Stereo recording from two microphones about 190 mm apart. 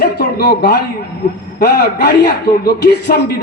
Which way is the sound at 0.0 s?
55° left (ahead or behind).